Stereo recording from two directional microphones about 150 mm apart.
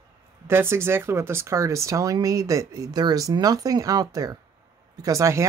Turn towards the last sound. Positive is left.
turn(degrees=-20)  # may be behind; listen again after turning